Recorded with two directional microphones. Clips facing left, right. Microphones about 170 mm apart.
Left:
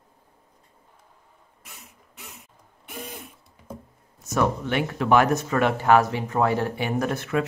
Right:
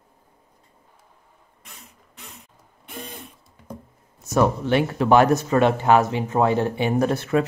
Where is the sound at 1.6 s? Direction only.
5° left (ahead or behind).